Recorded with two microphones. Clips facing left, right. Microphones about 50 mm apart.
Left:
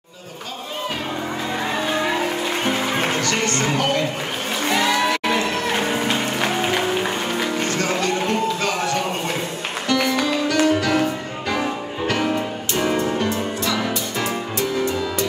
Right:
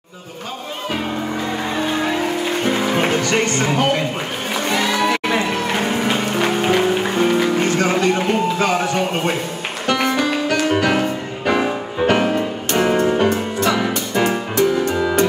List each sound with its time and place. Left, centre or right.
2.7 s music: centre
4.6 s music: centre
5.3 s music: centre
7.6 s a sound: right
9.8 s music: right
14.2 s music: right